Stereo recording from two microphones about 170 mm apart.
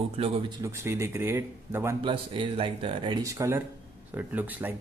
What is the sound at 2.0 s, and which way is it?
Speech, 30° right (ahead or behind).